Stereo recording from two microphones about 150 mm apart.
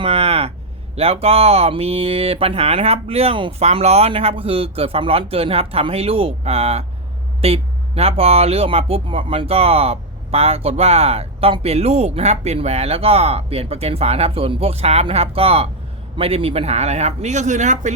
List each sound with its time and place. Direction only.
0.0 s speech: 40° right (ahead or behind)